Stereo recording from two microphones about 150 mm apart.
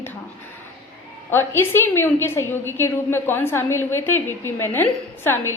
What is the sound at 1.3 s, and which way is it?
A woman's voice, 15° left (ahead or behind).